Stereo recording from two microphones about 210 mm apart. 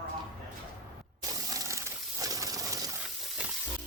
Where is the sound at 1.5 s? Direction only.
15° right (ahead or behind).